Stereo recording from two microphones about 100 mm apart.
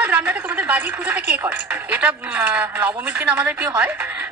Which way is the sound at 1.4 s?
15° right (ahead or behind).